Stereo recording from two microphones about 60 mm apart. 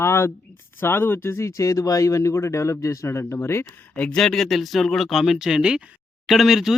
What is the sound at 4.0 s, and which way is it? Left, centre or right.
Speech, centre.